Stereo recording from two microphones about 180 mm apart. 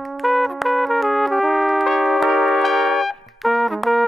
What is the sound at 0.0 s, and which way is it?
Music, centre (ahead or behind).